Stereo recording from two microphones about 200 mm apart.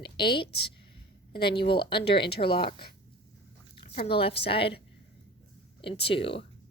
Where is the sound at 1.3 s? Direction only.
50° left (ahead or behind).